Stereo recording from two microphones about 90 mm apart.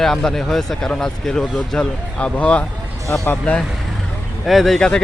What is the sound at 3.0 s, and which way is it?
Speech, 30° left (ahead or behind).